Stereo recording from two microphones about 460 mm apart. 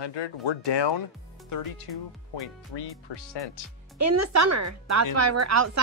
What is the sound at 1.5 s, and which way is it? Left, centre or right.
Speech, left.